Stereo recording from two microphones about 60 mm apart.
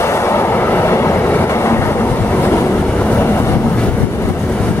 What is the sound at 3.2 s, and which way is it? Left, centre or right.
Train, left.